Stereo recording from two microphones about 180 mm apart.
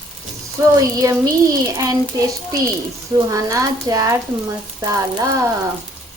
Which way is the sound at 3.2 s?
20° right (ahead or behind).